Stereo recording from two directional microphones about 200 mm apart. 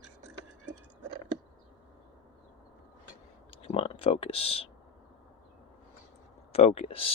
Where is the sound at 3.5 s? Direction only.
30° left (ahead or behind).